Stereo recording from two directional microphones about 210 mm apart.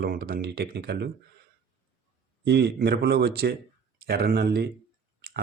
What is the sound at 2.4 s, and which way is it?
Speech, 50° right (ahead or behind).